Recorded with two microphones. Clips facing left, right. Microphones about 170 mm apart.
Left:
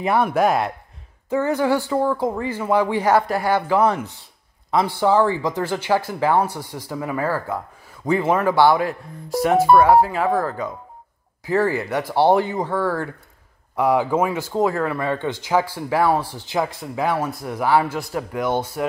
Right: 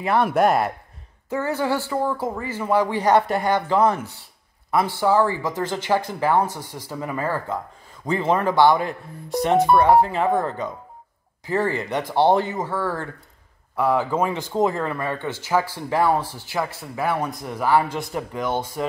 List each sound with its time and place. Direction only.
0.2 s speech: centre (ahead or behind)
1.3 s speech: 15° left (ahead or behind)
3.9 s speech: 20° left (ahead or behind); by 10.3 s 5° left (ahead or behind)
11.4 s speech: 10° left (ahead or behind)
15.0 s speech: 15° left (ahead or behind)